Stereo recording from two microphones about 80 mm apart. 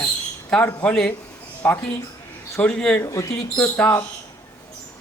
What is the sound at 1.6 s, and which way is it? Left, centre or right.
A man's voice, left.